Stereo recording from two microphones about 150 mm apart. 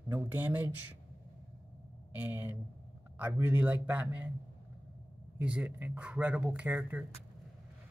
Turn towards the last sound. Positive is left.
turn(degrees=-10)  # may be behind; listen again after turning